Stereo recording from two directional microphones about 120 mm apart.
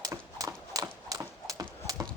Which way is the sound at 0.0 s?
25° right (ahead or behind).